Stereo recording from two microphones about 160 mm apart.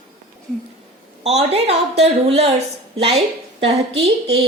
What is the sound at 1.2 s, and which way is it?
A woman's voice, 40° right (ahead or behind).